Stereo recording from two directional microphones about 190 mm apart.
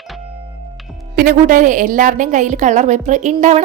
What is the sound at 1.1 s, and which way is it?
Speech, 50° right (ahead or behind).